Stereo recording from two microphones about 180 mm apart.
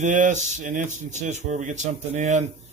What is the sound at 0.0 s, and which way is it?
Speech, 45° right (ahead or behind).